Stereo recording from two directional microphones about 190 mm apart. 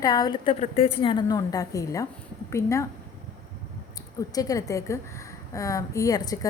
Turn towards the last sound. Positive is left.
turn(degrees=20)  # may be behind; listen again after turning